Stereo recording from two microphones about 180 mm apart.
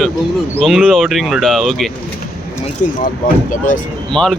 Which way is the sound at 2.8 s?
45° left (ahead or behind).